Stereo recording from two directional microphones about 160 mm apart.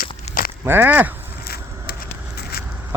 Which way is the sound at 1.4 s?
75° left (ahead or behind).